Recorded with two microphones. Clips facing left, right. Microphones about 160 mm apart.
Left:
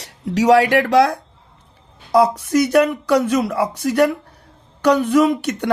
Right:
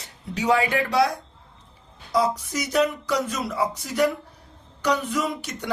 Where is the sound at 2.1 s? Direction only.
65° left (ahead or behind).